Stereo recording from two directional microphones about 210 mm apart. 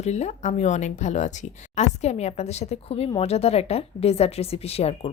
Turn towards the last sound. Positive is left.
turn(degrees=30)  # may be behind; listen again after turning